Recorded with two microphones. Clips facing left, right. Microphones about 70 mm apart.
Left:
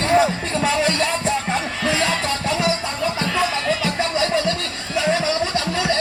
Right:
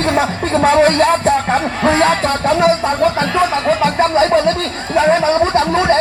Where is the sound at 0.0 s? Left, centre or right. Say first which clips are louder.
Right 2 dB; right.